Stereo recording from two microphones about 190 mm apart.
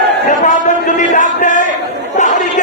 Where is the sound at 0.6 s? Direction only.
40° left (ahead or behind).